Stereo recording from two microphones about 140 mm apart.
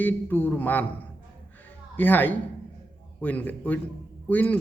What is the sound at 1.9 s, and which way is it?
A man's voice, 15° left (ahead or behind).